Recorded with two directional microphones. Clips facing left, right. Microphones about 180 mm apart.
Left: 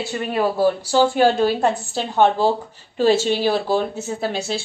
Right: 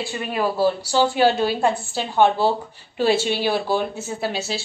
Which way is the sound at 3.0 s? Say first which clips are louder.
Left 3 dB; 45° left (ahead or behind).